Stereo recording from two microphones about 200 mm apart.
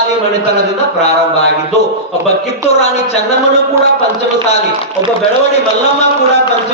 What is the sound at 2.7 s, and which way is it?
Speech, 35° left (ahead or behind).